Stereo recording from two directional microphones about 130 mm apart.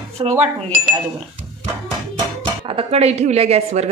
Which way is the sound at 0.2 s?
45° right (ahead or behind).